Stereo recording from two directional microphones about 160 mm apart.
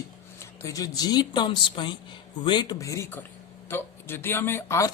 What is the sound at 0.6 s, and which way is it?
Speech, 20° left (ahead or behind).